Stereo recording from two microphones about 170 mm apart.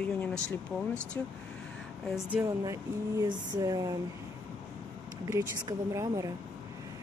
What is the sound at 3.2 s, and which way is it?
Speech, 20° right (ahead or behind).